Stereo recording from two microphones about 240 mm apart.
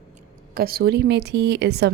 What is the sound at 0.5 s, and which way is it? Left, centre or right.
A woman's voice, right.